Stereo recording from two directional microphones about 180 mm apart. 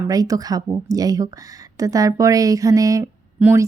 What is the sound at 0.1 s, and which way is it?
Speech, 20° right (ahead or behind).